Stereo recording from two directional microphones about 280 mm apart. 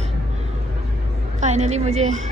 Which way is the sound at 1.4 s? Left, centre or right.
Right.